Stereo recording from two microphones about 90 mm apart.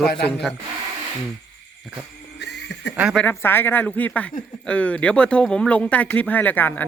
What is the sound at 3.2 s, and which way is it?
Speech, 25° left (ahead or behind).